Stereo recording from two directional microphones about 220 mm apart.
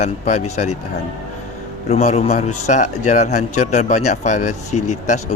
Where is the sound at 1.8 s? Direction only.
30° left (ahead or behind).